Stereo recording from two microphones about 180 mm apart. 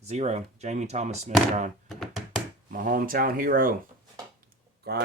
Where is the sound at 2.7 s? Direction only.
50° right (ahead or behind).